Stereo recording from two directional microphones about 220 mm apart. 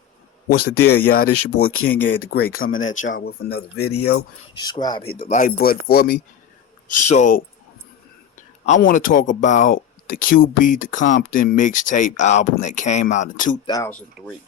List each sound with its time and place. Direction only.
0.5 s speech: 90° left
0.9 s speech: 45° left (ahead or behind)
2.8 s speech: 35° left (ahead or behind)
3.1 s speech: 45° left (ahead or behind)
4.6 s speech: 20° left (ahead or behind)
5.2 s speech: 35° left (ahead or behind)
6.8 s speech: 35° left (ahead or behind)
8.6 s speech: 35° left (ahead or behind)
13.7 s speech: 15° left (ahead or behind)
14.2 s speech: centre (ahead or behind)